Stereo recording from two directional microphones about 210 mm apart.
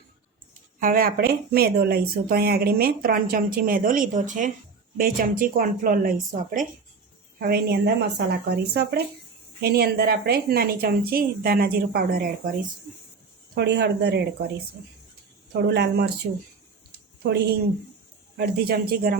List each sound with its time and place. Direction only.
0.8 s speech: 45° right (ahead or behind)
13.6 s speech: 55° right (ahead or behind)
15.6 s speech: 55° right (ahead or behind)
18.3 s speech: 50° right (ahead or behind)